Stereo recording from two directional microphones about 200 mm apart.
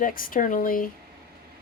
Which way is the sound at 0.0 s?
45° left (ahead or behind).